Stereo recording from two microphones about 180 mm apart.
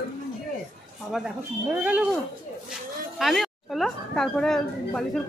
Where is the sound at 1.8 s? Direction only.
5° right (ahead or behind).